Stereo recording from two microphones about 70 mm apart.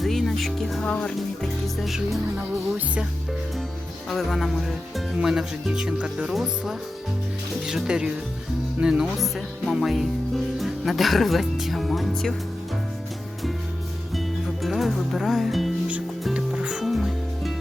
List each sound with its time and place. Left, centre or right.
0.0 s music: centre
0.8 s speech: centre
1.4 s speech: centre
4.1 s speech: centre
14.1 s music: centre
16.3 s music: centre